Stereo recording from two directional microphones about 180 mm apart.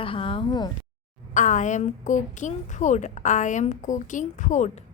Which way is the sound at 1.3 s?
45° left (ahead or behind).